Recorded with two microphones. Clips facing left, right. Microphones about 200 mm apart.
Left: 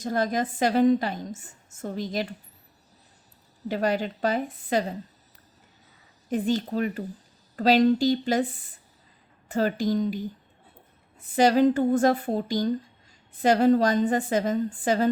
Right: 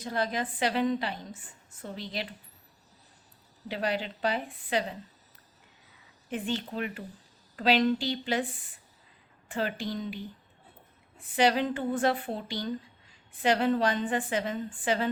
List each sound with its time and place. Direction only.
0.0 s a woman's voice: 45° left (ahead or behind)
3.7 s a woman's voice: 45° left (ahead or behind)
6.3 s a woman's voice: 40° left (ahead or behind)
11.3 s a woman's voice: 40° left (ahead or behind)